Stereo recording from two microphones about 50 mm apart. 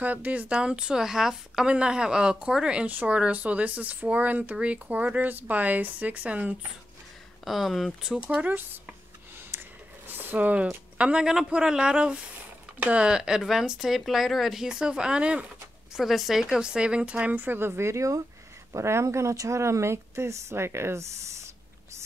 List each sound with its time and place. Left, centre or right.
0.0 s speech: right
0.5 s speech: centre
2.9 s speech: right
7.4 s speech: centre
8.3 s speech: right
9.5 s a sound: right
11.2 s speech: centre
15.9 s speech: centre
16.6 s speech: centre; by 21.5 s right